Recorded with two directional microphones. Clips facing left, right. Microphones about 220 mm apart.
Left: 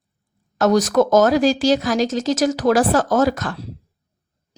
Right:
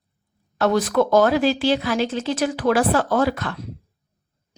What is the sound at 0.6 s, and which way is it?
A woman's voice, 45° left (ahead or behind).